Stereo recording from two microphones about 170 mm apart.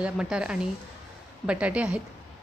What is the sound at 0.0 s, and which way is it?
A woman's voice, 5° right (ahead or behind).